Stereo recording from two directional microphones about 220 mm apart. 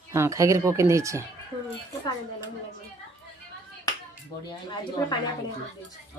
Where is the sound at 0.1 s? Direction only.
15° right (ahead or behind).